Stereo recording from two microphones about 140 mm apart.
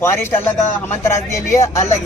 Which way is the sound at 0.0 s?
20° left (ahead or behind).